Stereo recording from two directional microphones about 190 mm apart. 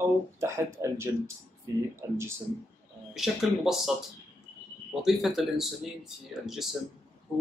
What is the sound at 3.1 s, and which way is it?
Speech, centre (ahead or behind).